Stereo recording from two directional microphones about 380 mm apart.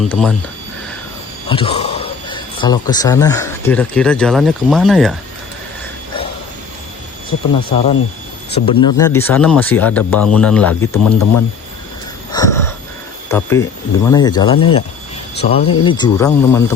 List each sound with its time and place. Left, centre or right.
0.0 s speech: centre
1.5 s a man's voice: centre
8.4 s speech: centre
10.9 s speech: left
12.3 s gasp: centre
13.3 s speech: centre